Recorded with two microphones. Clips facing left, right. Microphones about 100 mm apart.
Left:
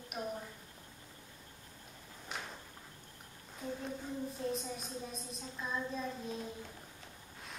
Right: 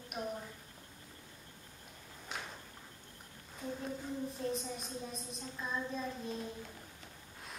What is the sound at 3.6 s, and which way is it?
A child's voice, centre (ahead or behind).